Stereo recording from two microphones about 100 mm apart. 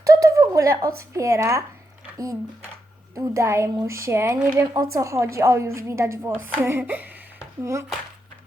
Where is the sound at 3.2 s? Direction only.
30° right (ahead or behind).